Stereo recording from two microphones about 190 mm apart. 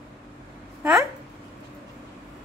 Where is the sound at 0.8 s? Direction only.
15° right (ahead or behind).